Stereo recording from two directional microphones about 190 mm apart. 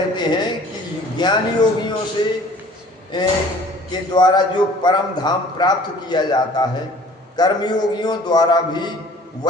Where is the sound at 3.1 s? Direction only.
25° left (ahead or behind).